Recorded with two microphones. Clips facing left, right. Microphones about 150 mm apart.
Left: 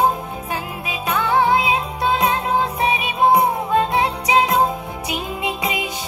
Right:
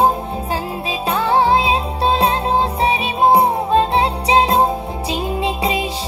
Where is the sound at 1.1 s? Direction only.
30° right (ahead or behind).